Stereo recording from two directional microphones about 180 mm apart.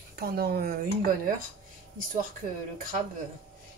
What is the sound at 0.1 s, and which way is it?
Speech, 60° right (ahead or behind).